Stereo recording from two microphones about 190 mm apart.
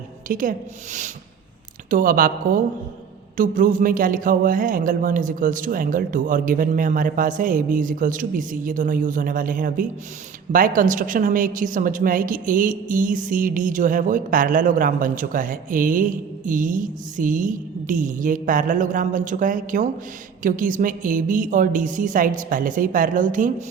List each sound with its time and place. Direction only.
0.3 s a woman's voice: 45° right (ahead or behind)
1.9 s a woman's voice: 45° right (ahead or behind)